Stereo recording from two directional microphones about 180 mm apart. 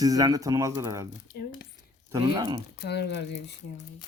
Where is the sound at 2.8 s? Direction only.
70° left (ahead or behind).